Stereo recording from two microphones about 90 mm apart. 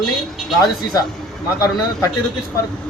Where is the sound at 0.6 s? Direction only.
45° left (ahead or behind).